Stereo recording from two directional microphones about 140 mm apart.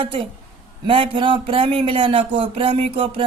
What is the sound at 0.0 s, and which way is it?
Speech, 40° right (ahead or behind).